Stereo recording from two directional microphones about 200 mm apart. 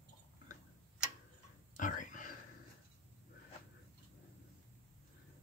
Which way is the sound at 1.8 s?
40° left (ahead or behind).